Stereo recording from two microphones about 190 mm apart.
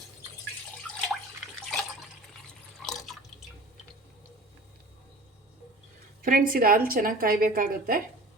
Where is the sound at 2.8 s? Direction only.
Centre (ahead or behind).